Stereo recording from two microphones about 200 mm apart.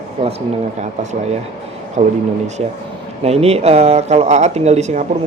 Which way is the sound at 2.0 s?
35° right (ahead or behind).